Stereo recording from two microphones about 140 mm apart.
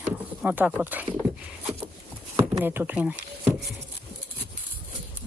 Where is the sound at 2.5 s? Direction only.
15° right (ahead or behind).